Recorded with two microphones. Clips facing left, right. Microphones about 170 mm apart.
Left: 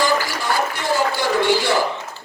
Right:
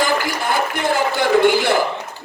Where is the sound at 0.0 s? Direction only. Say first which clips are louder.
Right 1 dB; 55° right (ahead or behind).